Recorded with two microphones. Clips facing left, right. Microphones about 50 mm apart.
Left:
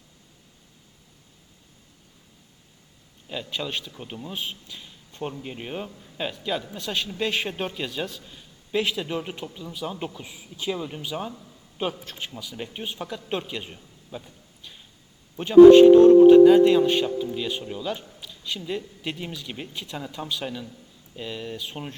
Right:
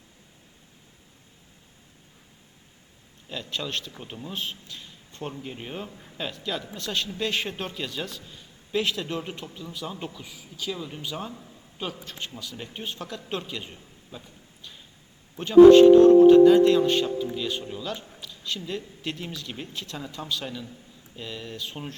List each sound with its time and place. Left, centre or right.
3.2 s a man's voice: centre
15.4 s a man's voice: centre
18.2 s a sound: centre
19.0 s a man's voice: centre